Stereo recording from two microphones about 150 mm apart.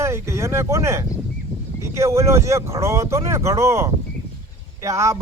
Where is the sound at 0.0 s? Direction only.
20° right (ahead or behind).